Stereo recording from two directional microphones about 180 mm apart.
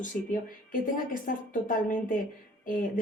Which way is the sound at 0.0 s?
50° left (ahead or behind).